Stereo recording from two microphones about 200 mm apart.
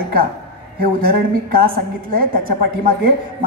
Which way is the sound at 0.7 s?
45° right (ahead or behind).